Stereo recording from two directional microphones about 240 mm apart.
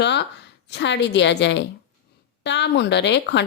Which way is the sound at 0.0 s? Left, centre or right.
Left.